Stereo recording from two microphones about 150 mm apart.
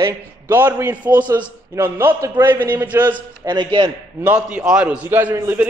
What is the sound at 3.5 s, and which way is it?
Speech, 30° right (ahead or behind).